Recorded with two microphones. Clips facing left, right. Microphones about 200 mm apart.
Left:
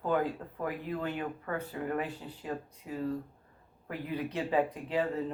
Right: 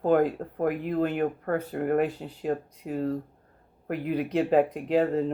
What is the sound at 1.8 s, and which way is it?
Speech, 55° right (ahead or behind).